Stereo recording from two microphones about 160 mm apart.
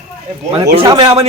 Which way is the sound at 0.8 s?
35° right (ahead or behind).